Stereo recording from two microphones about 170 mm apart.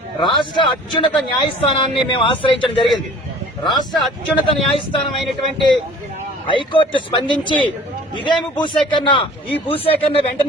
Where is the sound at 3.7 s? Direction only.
Centre (ahead or behind).